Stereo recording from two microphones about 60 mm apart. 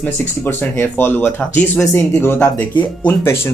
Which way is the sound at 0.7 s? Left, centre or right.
Left.